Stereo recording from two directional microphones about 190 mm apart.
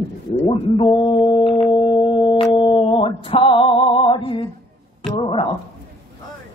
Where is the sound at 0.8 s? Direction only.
25° left (ahead or behind).